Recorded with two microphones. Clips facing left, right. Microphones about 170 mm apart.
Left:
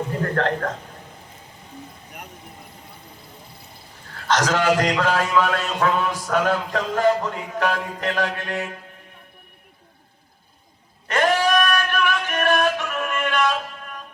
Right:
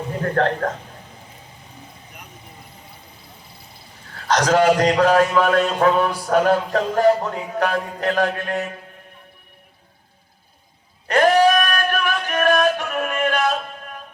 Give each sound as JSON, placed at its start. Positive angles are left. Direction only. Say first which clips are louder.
{"t": 0.4, "sound": "a man's voice", "louder": "right 4 dB", "side_deg": -40}
{"t": 4.3, "sound": "a man's voice", "louder": "right 4 dB", "side_deg": -40}
{"t": 11.1, "sound": "music", "louder": "right 5 dB", "side_deg": -45}